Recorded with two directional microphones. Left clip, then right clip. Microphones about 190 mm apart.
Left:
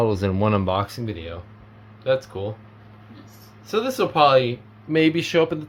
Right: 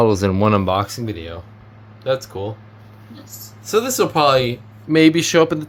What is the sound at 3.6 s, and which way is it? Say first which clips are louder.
Speech: right 5 dB; 20° right (ahead or behind).